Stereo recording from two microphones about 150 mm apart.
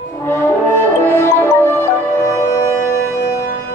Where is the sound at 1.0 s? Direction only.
15° left (ahead or behind).